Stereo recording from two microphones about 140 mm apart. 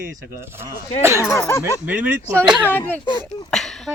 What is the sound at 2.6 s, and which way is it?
Speech, 15° left (ahead or behind).